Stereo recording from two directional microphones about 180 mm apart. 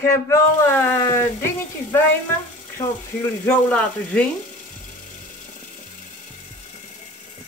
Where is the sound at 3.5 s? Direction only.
5° left (ahead or behind).